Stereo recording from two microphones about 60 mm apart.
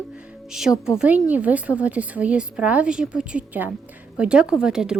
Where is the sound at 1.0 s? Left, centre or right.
Right.